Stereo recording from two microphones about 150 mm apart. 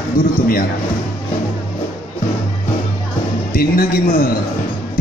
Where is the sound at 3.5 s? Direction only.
75° left (ahead or behind).